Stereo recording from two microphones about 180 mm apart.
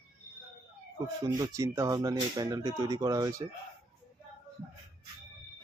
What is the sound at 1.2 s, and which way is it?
Speech, 20° right (ahead or behind).